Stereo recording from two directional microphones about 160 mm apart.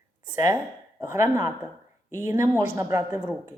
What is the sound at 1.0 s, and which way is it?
Speech, 20° right (ahead or behind).